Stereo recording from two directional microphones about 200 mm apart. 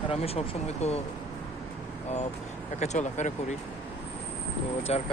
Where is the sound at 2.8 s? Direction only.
35° left (ahead or behind).